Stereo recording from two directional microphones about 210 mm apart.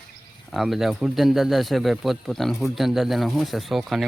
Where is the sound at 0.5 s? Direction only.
Centre (ahead or behind).